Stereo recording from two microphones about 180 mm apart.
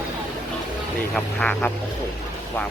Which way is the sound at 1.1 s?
5° left (ahead or behind).